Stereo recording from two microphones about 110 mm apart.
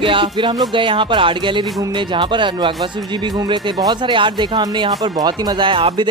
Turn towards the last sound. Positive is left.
turn(degrees=-50)  # may be behind; listen again after turning